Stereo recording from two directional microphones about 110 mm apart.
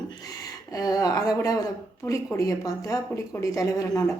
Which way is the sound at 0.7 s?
35° left (ahead or behind).